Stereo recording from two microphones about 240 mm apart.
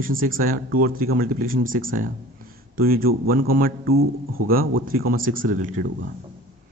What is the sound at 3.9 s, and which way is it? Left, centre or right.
Speech, right.